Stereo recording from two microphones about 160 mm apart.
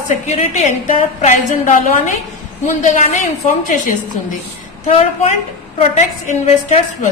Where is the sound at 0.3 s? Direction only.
45° left (ahead or behind).